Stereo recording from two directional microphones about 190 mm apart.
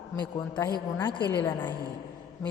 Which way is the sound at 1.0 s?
25° left (ahead or behind).